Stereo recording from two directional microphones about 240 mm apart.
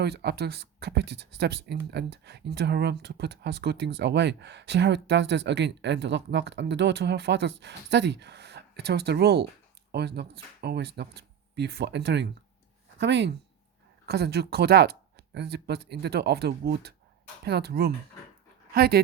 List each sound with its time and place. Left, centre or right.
0.0 s speech: right